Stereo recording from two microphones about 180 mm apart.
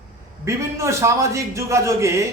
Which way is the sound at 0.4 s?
15° right (ahead or behind).